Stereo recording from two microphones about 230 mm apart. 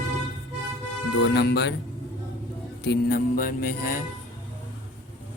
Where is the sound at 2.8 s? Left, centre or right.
Left.